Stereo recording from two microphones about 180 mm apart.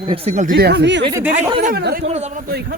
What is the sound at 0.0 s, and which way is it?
Speech, 30° right (ahead or behind).